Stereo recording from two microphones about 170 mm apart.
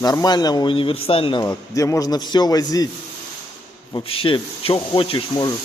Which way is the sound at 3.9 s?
30° left (ahead or behind).